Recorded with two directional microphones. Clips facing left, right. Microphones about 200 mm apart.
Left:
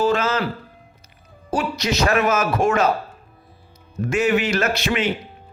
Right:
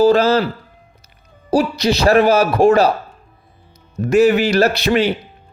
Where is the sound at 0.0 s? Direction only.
35° right (ahead or behind).